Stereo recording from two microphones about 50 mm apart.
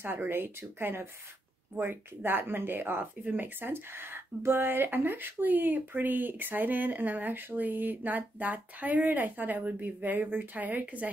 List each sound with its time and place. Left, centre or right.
0.0 s speech: right